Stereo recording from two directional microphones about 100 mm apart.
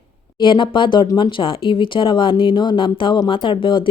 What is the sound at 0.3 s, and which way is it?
A woman's voice, 55° left (ahead or behind).